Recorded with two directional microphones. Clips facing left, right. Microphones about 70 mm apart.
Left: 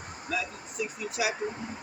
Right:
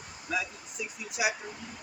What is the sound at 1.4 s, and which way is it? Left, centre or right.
Speech, left.